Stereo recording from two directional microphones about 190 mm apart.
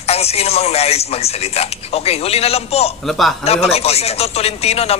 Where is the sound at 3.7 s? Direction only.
35° left (ahead or behind).